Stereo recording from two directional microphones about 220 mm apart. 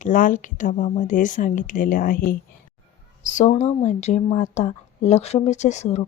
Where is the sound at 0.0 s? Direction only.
35° left (ahead or behind).